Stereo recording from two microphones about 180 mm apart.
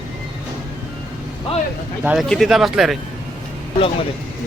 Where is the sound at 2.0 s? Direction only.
Centre (ahead or behind).